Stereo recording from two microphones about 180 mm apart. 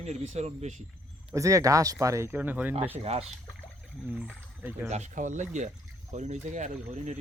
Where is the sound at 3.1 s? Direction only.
35° right (ahead or behind).